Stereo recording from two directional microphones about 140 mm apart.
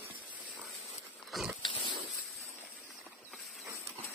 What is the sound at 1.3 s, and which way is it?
Pig, centre (ahead or behind).